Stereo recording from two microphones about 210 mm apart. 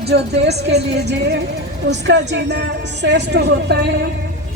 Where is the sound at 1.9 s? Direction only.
55° right (ahead or behind).